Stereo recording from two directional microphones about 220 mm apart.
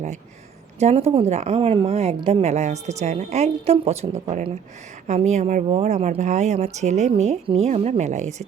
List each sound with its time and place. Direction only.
0.8 s a woman's voice: 30° right (ahead or behind)